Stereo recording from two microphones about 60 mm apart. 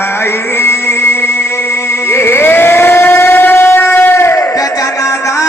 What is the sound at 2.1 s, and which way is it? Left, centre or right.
Civil defense siren, left.